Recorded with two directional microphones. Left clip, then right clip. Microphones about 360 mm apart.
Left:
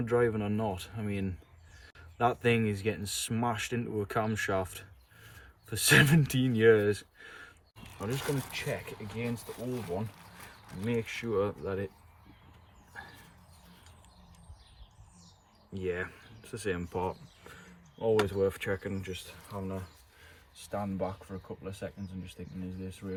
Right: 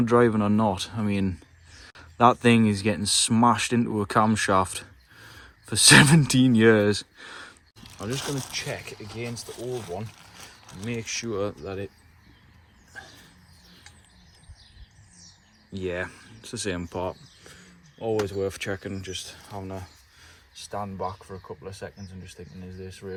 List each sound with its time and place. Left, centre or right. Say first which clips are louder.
0.0 s speech: right 8 dB; centre
8.5 s speech: right 4 dB; centre
10.8 s speech: right 2 dB; centre
15.7 s speech: right 4 dB; centre
18.3 s speech: right 1 dB; centre